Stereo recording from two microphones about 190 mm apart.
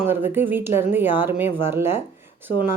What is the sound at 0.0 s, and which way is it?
Speech, 10° right (ahead or behind).